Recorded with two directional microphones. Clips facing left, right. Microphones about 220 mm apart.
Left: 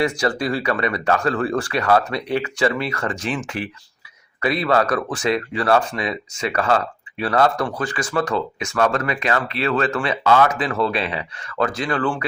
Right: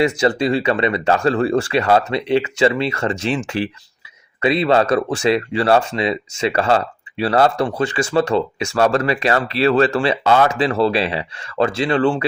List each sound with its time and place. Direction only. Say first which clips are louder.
0.0 s speech: right 4 dB; 25° right (ahead or behind)